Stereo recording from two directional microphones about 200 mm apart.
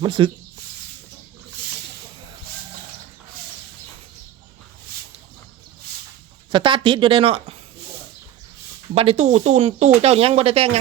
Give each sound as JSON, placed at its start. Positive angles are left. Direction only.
{"t": 0.0, "sound": "a woman's voice", "side_deg": -25}
{"t": 6.5, "sound": "a woman's voice", "side_deg": -25}
{"t": 9.0, "sound": "speech", "side_deg": -30}